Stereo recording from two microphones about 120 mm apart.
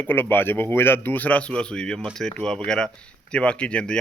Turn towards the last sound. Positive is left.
turn(degrees=10)  # may be behind; listen again after turning